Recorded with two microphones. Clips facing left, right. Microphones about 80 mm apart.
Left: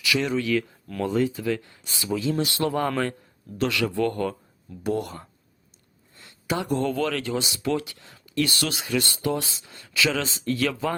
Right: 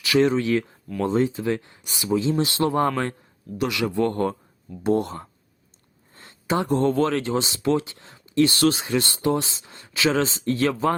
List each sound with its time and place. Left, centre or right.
0.0 s speech: right